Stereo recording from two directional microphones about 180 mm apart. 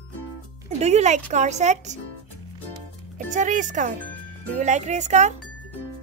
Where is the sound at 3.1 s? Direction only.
45° right (ahead or behind).